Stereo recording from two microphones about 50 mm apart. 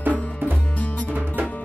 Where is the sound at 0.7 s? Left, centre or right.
Left.